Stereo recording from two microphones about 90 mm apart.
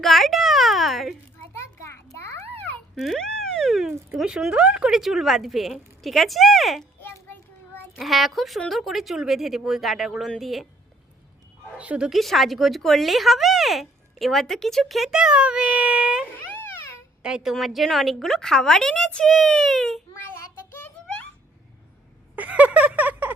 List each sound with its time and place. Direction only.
0.0 s a child's voice: centre (ahead or behind)
1.5 s children playing: 30° left (ahead or behind)
2.9 s a sound: centre (ahead or behind)
4.1 s a woman's voice: 5° right (ahead or behind)
7.9 s a woman's voice: centre (ahead or behind)
11.8 s speech: 10° right (ahead or behind)
16.3 s a sound: 25° left (ahead or behind)
17.2 s a woman's voice: 5° right (ahead or behind)
22.4 s a sound: 15° right (ahead or behind)